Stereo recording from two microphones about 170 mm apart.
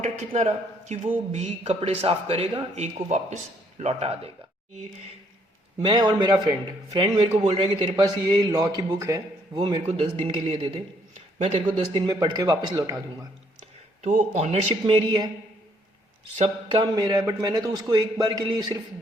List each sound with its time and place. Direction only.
0.0 s a man's voice: 40° right (ahead or behind)
5.8 s a man's voice: 25° right (ahead or behind)
10.0 s a man's voice: 35° right (ahead or behind)
14.0 s a man's voice: 45° right (ahead or behind)
14.8 s a man's voice: 25° right (ahead or behind)
16.8 s a man's voice: 20° right (ahead or behind)